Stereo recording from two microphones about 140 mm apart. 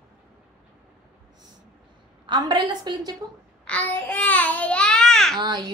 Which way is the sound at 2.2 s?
35° right (ahead or behind).